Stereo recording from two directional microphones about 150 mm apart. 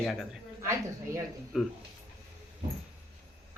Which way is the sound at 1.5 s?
5° right (ahead or behind).